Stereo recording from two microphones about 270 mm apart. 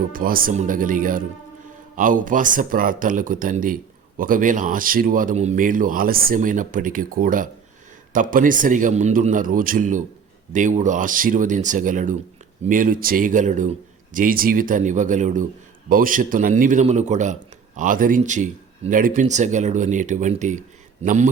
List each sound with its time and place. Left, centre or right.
0.0 s speech: right